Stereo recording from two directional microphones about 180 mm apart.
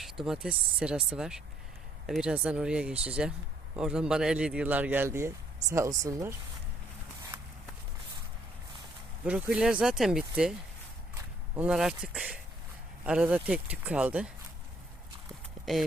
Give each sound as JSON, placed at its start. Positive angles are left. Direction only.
{"t": 0.0, "sound": "speech", "side_deg": 0}
{"t": 9.2, "sound": "speech", "side_deg": -5}
{"t": 11.5, "sound": "speech", "side_deg": -5}